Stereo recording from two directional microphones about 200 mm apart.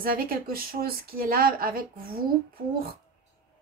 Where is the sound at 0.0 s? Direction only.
45° right (ahead or behind).